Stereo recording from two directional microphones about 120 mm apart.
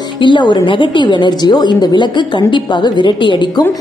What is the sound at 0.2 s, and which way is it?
A woman's voice, 40° left (ahead or behind).